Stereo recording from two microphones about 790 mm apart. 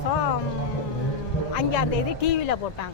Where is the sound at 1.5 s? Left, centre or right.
Left.